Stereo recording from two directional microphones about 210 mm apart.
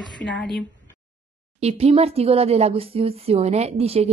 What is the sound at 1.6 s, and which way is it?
Speech, 30° right (ahead or behind).